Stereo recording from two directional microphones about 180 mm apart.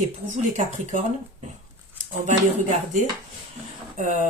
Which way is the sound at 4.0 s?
45° right (ahead or behind).